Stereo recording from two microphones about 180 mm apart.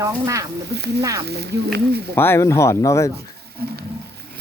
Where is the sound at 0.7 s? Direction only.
70° right (ahead or behind).